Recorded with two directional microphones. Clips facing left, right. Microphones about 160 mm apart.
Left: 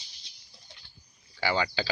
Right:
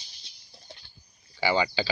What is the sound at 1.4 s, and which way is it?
Speech, 10° right (ahead or behind).